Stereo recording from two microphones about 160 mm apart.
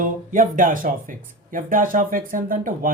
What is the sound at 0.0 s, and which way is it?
Speech, 55° right (ahead or behind).